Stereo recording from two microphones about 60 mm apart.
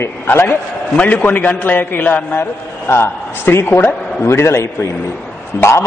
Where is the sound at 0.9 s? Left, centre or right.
Left.